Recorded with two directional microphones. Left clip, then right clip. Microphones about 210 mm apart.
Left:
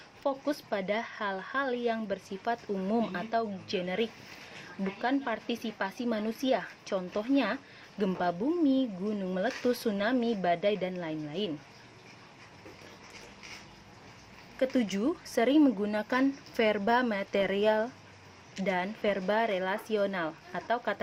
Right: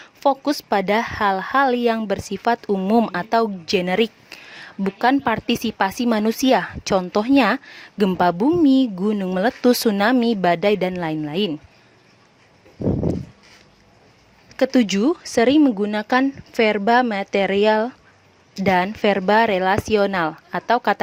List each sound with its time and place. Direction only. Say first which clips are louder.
0.2 s a woman's voice: right 13 dB; 50° right (ahead or behind)
14.5 s a woman's voice: right 11 dB; 45° right (ahead or behind)